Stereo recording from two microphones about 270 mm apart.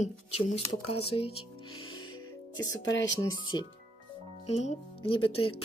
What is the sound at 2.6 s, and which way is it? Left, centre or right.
Speech, left.